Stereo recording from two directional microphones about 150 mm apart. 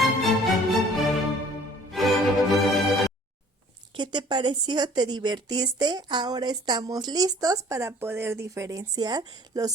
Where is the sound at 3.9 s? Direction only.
30° right (ahead or behind).